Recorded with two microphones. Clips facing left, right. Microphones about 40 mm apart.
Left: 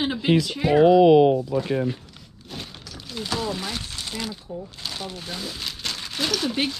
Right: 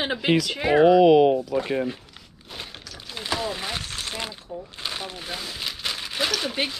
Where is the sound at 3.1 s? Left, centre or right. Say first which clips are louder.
Left 1 dB; centre.